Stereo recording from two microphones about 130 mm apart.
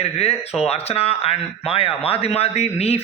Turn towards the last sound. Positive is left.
turn(degrees=50)  # may be behind; listen again after turning